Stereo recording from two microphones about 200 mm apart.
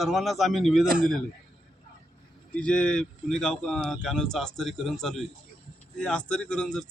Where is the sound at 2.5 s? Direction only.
5° left (ahead or behind).